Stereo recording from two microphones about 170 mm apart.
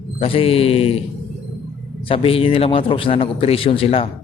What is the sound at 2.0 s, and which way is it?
A man's voice, 30° left (ahead or behind).